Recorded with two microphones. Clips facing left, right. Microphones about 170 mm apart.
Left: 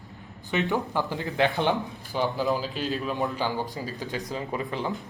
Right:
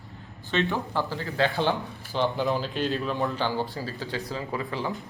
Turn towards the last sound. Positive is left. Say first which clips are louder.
# left 1 dB
turn(degrees=20)  # may be behind; listen again after turning